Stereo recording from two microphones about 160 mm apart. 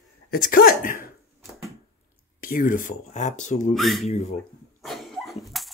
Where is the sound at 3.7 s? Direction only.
Centre (ahead or behind).